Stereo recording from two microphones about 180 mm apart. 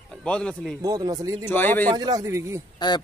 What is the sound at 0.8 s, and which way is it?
Speech, 20° right (ahead or behind).